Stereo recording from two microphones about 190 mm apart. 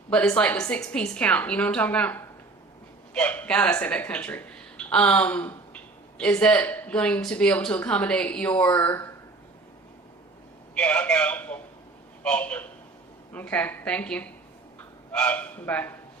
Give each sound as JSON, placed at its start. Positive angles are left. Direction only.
{"t": 0.1, "sound": "a woman's voice", "side_deg": 5}
{"t": 10.8, "sound": "speech", "side_deg": 5}